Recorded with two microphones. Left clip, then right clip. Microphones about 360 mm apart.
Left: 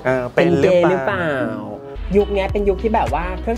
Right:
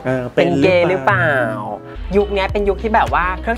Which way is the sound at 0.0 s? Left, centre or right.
Left.